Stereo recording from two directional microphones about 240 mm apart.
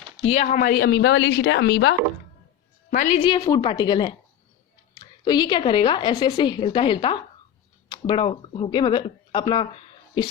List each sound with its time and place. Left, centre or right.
0.3 s a woman's voice: left
2.9 s a woman's voice: left
3.2 s a woman's voice: centre
5.2 s a woman's voice: centre